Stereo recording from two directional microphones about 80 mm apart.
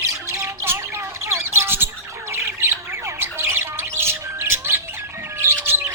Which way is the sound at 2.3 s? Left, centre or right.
Right.